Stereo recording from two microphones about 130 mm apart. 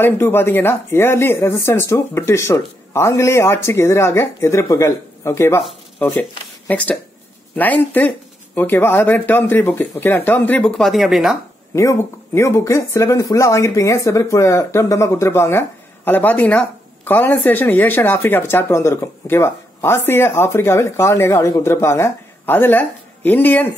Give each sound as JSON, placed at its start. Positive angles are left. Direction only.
{"t": 0.0, "sound": "speech", "side_deg": 20}
{"t": 10.8, "sound": "speech", "side_deg": 0}
{"t": 11.7, "sound": "speech", "side_deg": 25}